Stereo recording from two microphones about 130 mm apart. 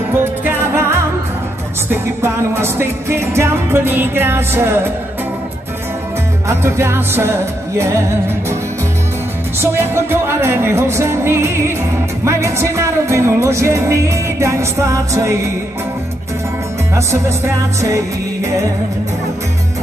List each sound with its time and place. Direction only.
0.2 s music: 15° right (ahead or behind)
6.4 s music: 20° right (ahead or behind)
9.6 s music: 20° right (ahead or behind)
17.7 s music: 25° right (ahead or behind)